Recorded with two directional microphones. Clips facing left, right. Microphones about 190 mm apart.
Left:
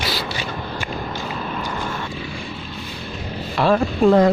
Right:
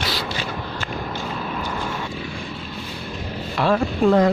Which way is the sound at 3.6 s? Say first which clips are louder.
Left 2 dB; 35° left (ahead or behind).